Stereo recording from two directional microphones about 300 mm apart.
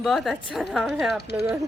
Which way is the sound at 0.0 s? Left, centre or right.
Centre.